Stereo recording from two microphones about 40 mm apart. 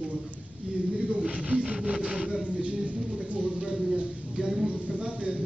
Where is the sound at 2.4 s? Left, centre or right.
Right.